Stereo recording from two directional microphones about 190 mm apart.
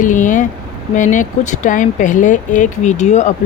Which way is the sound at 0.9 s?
45° left (ahead or behind).